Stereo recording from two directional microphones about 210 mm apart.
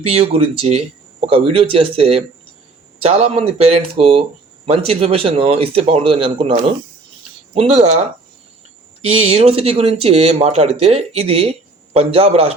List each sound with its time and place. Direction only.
0.0 s speech: 30° right (ahead or behind)
9.0 s speech: 30° right (ahead or behind)